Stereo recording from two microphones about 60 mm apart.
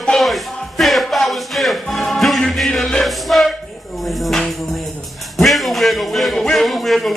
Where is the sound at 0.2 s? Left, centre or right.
Centre.